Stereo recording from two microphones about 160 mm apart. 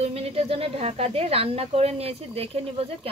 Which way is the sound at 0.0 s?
40° right (ahead or behind).